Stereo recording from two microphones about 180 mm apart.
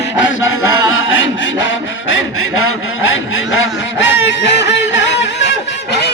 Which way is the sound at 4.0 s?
85° left.